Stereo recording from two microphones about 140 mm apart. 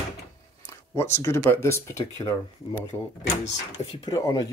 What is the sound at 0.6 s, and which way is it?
Speech, 20° left (ahead or behind).